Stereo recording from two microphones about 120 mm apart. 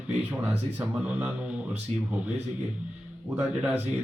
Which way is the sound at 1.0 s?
10° right (ahead or behind).